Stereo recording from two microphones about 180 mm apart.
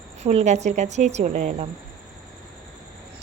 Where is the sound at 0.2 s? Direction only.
40° right (ahead or behind).